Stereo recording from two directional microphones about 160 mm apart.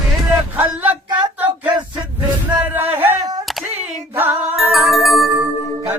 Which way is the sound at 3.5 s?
Centre (ahead or behind).